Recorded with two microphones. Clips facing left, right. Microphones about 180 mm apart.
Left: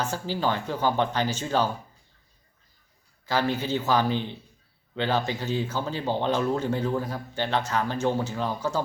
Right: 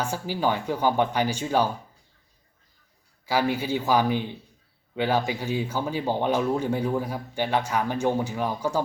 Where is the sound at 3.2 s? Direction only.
10° right (ahead or behind).